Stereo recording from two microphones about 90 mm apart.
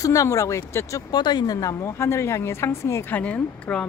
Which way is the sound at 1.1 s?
55° left (ahead or behind).